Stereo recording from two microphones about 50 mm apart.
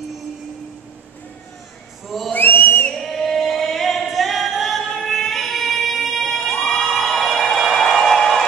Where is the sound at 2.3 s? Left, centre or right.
Left.